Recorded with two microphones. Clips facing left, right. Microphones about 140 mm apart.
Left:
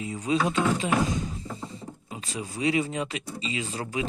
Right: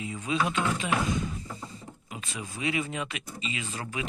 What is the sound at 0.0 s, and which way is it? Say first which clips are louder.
Speech: left 3 dB; 35° left (ahead or behind).